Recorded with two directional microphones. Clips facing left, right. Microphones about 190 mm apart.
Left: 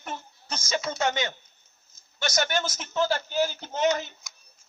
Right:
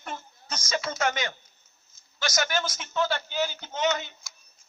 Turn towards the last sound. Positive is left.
turn(degrees=45)  # may be behind; listen again after turning